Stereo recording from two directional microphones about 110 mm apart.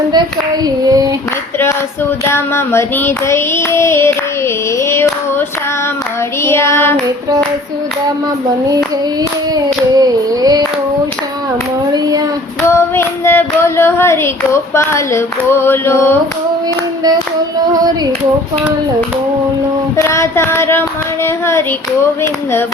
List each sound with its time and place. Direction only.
0.6 s female singing: 35° right (ahead or behind)
2.2 s child singing: 25° left (ahead or behind)
9.9 s female singing: 35° right (ahead or behind)
12.6 s child singing: 25° left (ahead or behind)
17.7 s female singing: 35° right (ahead or behind)
20.0 s child singing: 25° left (ahead or behind)